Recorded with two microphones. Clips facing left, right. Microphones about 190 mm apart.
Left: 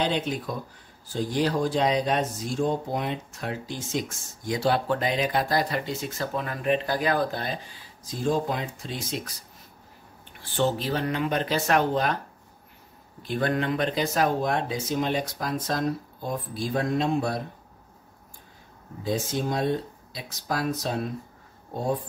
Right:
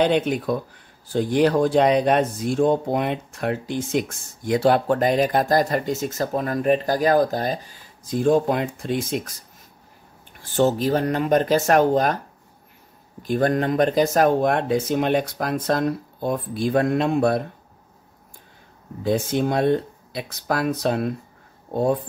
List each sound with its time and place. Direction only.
0.0 s speech: 60° right (ahead or behind)
10.4 s speech: 45° right (ahead or behind)
13.2 s speech: 45° right (ahead or behind); by 17.4 s 60° right (ahead or behind)
19.0 s speech: 60° right (ahead or behind)